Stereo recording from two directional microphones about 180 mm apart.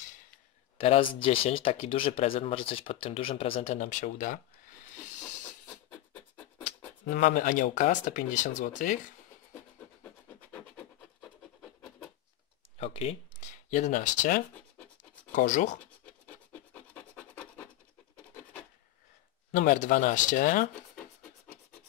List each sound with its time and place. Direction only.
0.7 s speech: 30° left (ahead or behind)
5.7 s a sound: 10° left (ahead or behind)
7.1 s speech: 45° left (ahead or behind)
10.5 s scratch: 10° left (ahead or behind)
12.7 s speech: 35° left (ahead or behind)
16.5 s scratch: 5° left (ahead or behind)
19.5 s speech: 45° left (ahead or behind)